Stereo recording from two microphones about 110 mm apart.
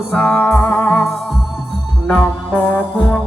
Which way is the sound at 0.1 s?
10° left (ahead or behind).